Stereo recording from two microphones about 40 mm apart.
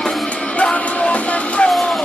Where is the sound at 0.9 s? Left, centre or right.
Left.